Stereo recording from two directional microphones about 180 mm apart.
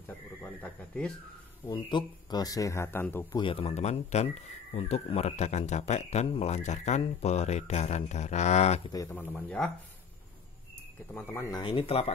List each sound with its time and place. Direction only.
0.4 s speech: 5° left (ahead or behind)
1.7 s speech: 25° left (ahead or behind)
3.3 s speech: 30° left (ahead or behind)
8.9 s speech: 15° left (ahead or behind)
11.1 s speech: 15° left (ahead or behind)
11.6 s speech: 30° left (ahead or behind)